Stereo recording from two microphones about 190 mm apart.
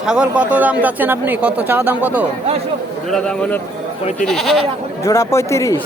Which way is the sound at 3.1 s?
5° left (ahead or behind).